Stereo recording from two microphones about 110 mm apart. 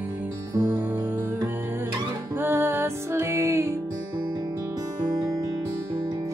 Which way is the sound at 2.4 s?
20° right (ahead or behind).